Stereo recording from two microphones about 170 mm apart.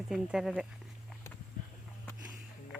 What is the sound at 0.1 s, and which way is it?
Speech, 5° right (ahead or behind).